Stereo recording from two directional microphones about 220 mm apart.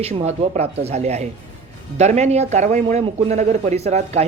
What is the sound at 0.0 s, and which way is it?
A man's voice, 30° right (ahead or behind).